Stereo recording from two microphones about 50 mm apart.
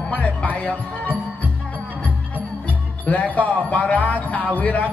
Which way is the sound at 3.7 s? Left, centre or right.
Left.